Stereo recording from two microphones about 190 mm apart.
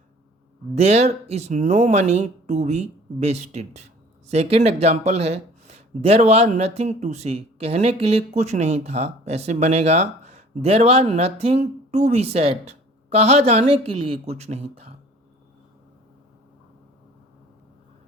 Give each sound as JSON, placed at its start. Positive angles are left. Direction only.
{"t": 0.8, "sound": "speech", "side_deg": -35}